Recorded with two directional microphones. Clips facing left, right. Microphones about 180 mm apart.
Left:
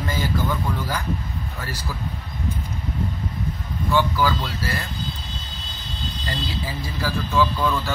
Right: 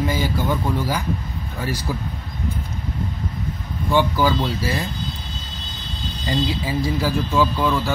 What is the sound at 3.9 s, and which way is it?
Speech, 15° right (ahead or behind).